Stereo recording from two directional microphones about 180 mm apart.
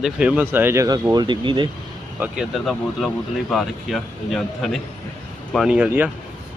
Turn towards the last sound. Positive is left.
turn(degrees=-10)  # may be behind; listen again after turning